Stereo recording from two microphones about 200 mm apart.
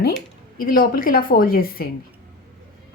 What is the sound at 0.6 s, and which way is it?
A woman's voice, 45° left (ahead or behind).